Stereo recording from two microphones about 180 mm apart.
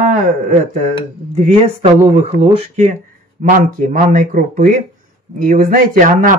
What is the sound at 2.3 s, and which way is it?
Speech, 40° right (ahead or behind).